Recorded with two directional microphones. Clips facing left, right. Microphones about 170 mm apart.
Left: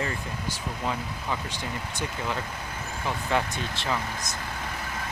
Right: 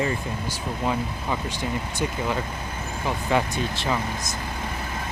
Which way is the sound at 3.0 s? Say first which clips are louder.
Right 4 dB; 10° right (ahead or behind).